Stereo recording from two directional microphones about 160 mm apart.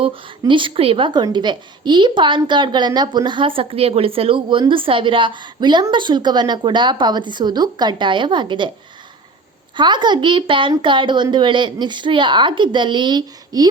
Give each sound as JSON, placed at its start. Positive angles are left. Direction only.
{"t": 0.0, "sound": "a woman's voice", "side_deg": -30}
{"t": 9.7, "sound": "a woman's voice", "side_deg": -30}